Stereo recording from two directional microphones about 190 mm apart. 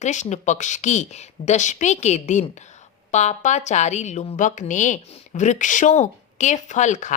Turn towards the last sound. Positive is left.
turn(degrees=40)  # may be behind; listen again after turning